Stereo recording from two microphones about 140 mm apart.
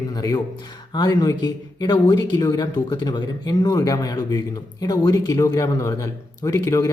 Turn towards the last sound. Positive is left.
turn(degrees=25)  # may be behind; listen again after turning